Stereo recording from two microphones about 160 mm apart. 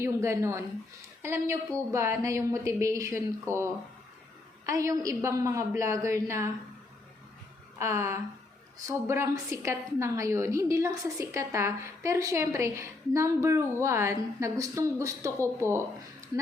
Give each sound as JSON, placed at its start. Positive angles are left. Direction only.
{"t": 0.0, "sound": "a woman's voice", "side_deg": -15}
{"t": 7.8, "sound": "a woman's voice", "side_deg": -15}